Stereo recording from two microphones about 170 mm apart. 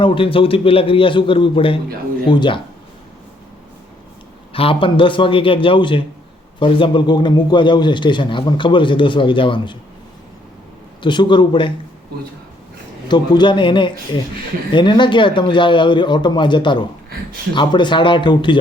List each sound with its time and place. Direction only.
0.0 s a man's voice: 30° left (ahead or behind)
4.5 s a man's voice: 30° left (ahead or behind)
11.0 s a man's voice: 25° left (ahead or behind)
13.1 s a man's voice: 25° left (ahead or behind)